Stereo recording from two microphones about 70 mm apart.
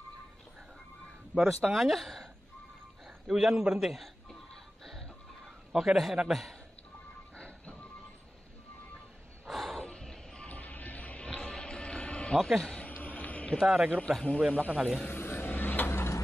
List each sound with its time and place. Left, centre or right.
1.3 s speech: centre
3.3 s a man's voice: centre
4.8 s music: centre
5.7 s a man's voice: centre
7.3 s music: centre
9.5 s snort: centre
9.8 s a sound: centre
13.6 s a man's voice: centre
13.9 s a man's voice: centre
15.0 s vehicle: left